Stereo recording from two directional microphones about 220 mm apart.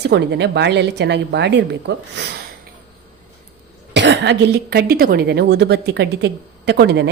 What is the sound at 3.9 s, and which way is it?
Speech, 50° right (ahead or behind).